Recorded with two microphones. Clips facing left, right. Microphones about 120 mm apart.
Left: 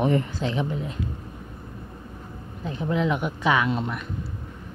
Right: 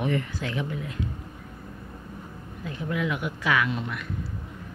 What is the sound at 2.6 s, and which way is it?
A woman's voice, 25° left (ahead or behind).